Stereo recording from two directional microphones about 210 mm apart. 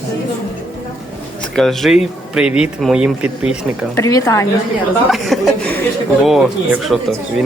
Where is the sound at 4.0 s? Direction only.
15° left (ahead or behind).